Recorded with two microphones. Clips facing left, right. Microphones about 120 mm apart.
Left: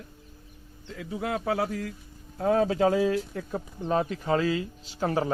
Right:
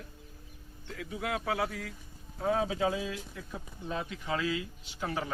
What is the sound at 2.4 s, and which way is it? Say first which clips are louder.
A man's voice: left 7 dB; 55° left (ahead or behind).